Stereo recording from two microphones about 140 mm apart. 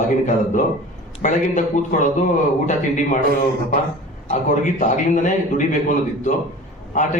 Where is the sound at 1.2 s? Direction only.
60° left (ahead or behind).